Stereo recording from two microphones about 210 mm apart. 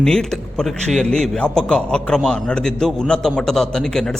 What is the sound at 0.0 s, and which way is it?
A man's voice, 5° left (ahead or behind).